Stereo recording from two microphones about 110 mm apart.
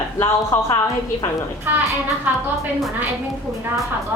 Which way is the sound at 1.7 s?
15° right (ahead or behind).